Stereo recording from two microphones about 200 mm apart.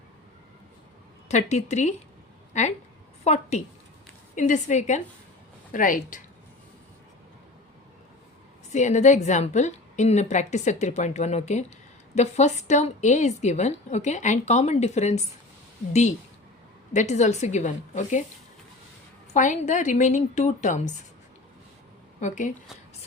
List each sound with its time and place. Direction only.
1.3 s a woman's voice: 35° left (ahead or behind)
8.7 s a woman's voice: 35° left (ahead or behind)
19.3 s a woman's voice: 35° left (ahead or behind)
22.2 s a woman's voice: 40° left (ahead or behind)